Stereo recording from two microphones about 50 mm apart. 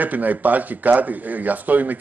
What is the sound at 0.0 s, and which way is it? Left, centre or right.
A man's voice, right.